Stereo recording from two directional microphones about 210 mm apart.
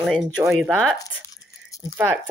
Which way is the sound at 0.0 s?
Centre (ahead or behind).